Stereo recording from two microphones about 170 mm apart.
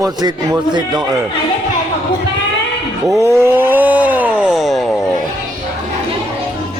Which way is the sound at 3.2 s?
15° right (ahead or behind).